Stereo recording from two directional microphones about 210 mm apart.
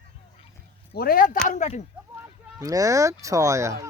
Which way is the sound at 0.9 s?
45° left (ahead or behind).